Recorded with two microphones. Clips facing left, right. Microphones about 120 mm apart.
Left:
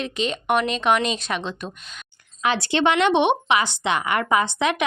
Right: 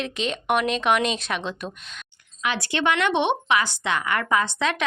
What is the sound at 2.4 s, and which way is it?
Speech, 30° left (ahead or behind).